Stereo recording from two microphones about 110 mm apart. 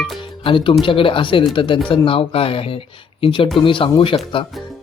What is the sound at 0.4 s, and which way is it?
Speech, 50° left (ahead or behind).